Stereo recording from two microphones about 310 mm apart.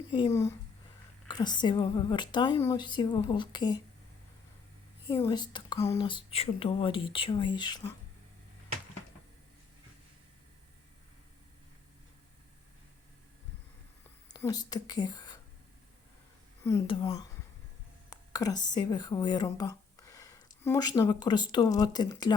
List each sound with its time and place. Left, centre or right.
0.1 s speech: centre
5.0 s speech: centre
14.3 s speech: centre
16.6 s speech: centre